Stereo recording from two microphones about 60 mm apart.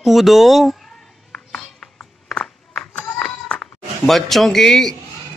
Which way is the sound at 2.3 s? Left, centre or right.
Left.